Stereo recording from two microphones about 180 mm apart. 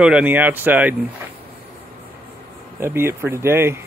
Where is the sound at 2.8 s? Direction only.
10° right (ahead or behind).